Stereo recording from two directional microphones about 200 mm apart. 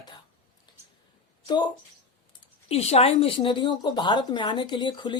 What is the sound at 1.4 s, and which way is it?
A woman's voice, 20° left (ahead or behind).